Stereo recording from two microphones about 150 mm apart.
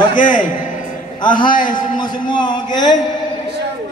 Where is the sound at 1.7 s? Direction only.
30° left (ahead or behind).